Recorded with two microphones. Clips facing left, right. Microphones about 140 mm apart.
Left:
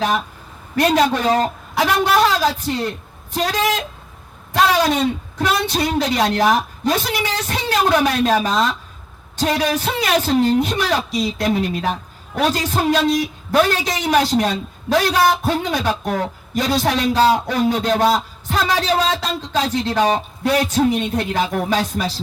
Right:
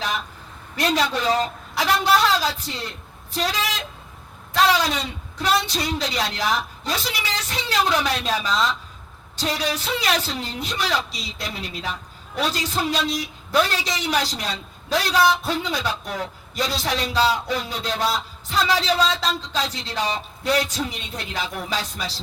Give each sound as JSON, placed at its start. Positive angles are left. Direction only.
{"t": 0.8, "sound": "speech", "side_deg": 55}